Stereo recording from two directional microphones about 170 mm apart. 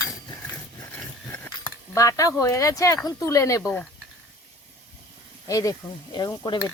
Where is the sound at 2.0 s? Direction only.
20° left (ahead or behind).